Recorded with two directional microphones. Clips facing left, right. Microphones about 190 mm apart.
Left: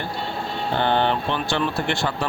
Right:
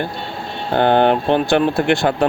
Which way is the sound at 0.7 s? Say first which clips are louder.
Right 8 dB; 50° right (ahead or behind).